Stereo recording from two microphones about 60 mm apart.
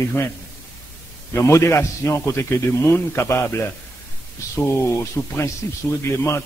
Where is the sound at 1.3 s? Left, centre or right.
Left.